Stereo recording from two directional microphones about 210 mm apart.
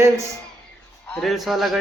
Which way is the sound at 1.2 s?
Centre (ahead or behind).